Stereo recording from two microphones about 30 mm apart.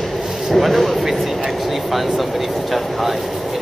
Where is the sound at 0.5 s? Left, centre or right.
Centre.